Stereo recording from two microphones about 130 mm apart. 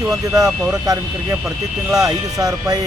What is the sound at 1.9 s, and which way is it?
Speech, 25° right (ahead or behind).